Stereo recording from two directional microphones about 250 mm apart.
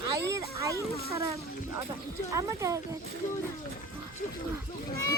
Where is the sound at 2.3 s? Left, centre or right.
Centre.